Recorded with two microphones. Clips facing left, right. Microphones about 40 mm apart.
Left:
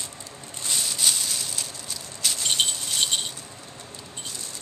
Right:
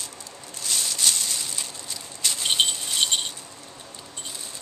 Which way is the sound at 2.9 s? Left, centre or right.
Centre.